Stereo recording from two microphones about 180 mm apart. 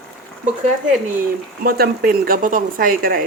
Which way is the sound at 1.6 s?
55° right (ahead or behind).